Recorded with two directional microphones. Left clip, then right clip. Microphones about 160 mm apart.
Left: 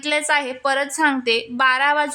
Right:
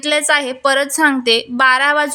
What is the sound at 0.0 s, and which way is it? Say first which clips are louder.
A woman's voice: right 5 dB; 15° right (ahead or behind).